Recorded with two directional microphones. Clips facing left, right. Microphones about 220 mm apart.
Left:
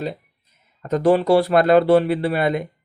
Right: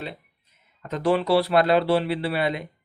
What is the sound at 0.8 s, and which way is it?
Speech, 45° left (ahead or behind).